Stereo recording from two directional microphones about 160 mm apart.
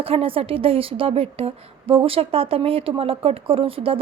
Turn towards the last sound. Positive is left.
turn(degrees=-35)  # may be behind; listen again after turning